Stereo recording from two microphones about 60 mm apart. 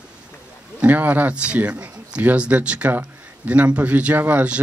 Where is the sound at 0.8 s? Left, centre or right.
Right.